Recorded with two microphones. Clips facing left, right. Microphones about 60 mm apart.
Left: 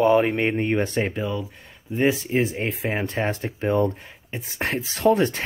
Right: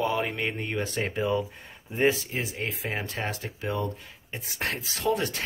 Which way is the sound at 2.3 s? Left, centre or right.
Left.